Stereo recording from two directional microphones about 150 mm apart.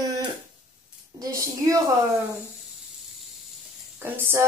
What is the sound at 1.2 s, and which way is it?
Speech, 20° right (ahead or behind).